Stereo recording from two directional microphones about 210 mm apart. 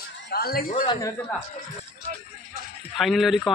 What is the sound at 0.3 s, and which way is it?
Speech, 45° left (ahead or behind).